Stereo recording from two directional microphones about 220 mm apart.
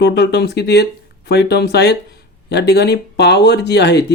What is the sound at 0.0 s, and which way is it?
Speech, 50° left (ahead or behind).